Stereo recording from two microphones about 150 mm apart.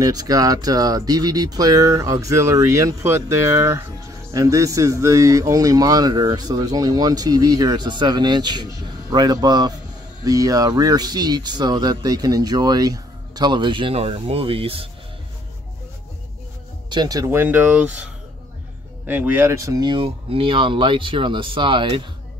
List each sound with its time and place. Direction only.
0.0 s speech: 25° right (ahead or behind)
16.9 s speech: 25° right (ahead or behind); by 18.0 s 10° right (ahead or behind)
19.0 s speech: 10° right (ahead or behind); by 22.0 s 35° right (ahead or behind)